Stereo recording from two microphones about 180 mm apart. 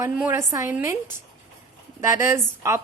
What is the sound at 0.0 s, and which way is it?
Speech, 10° right (ahead or behind).